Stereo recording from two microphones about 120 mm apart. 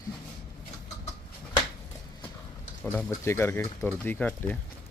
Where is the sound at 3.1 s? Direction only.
20° left (ahead or behind).